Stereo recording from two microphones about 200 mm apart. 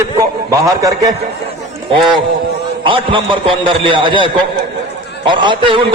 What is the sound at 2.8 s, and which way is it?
A man's voice, 25° right (ahead or behind).